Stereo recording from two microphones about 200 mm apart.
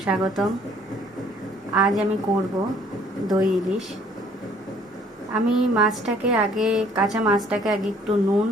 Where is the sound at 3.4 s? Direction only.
Centre (ahead or behind).